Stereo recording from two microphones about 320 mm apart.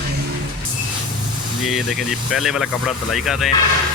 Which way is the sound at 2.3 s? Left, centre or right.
Centre.